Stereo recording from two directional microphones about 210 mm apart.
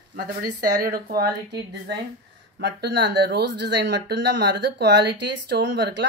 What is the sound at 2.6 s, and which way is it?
Speech, 55° right (ahead or behind).